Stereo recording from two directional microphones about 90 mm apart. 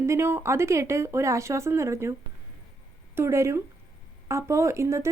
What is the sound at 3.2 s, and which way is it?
Speech, 30° right (ahead or behind).